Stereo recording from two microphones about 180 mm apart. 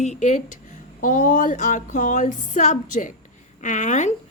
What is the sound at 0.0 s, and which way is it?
A woman's voice, 40° left (ahead or behind).